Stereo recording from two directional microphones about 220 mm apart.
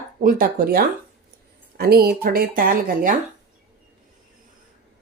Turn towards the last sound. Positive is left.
turn(degrees=-40)  # may be behind; listen again after turning